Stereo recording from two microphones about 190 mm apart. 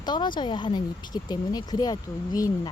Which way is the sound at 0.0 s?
25° left (ahead or behind).